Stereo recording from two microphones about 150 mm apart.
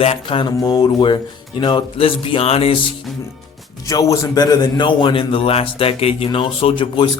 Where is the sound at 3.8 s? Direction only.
20° left (ahead or behind).